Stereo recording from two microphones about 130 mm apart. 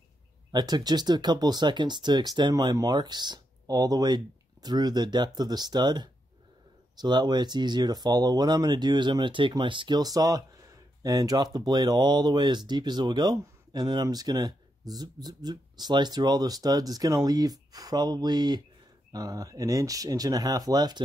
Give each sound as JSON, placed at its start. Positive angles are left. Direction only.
{"t": 0.5, "sound": "speech", "side_deg": -35}